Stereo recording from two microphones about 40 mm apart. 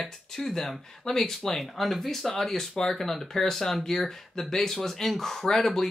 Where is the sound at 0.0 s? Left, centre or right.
Centre.